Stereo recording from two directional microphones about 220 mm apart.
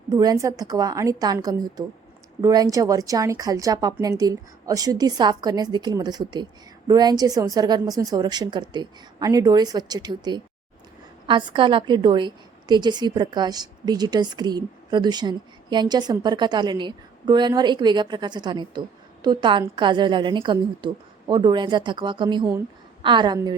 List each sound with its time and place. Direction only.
0.1 s a woman's voice: 15° right (ahead or behind)